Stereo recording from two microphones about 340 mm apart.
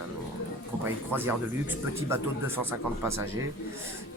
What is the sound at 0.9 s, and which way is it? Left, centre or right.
Speech, centre.